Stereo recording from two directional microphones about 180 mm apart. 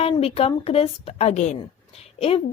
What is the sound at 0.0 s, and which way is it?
Speech, 35° left (ahead or behind).